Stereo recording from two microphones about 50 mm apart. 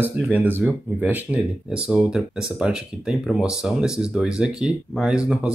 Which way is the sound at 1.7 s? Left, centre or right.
Centre.